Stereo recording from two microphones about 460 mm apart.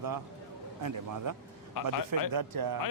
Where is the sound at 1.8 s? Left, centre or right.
Left.